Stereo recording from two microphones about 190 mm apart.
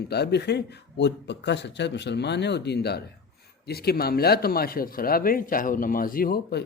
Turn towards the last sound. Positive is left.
turn(degrees=50)  # may be behind; listen again after turning